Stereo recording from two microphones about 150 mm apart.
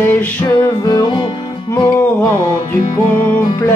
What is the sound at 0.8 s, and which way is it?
Music, 25° left (ahead or behind).